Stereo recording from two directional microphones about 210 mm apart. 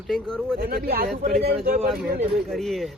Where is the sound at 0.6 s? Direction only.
45° right (ahead or behind).